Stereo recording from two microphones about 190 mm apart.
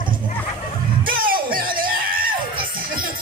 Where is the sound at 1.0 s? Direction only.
50° right (ahead or behind).